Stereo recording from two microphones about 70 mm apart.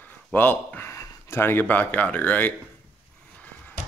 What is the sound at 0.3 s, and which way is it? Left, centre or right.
Speech, left.